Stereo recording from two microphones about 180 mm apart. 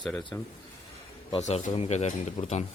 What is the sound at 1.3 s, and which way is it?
Speech, 35° left (ahead or behind).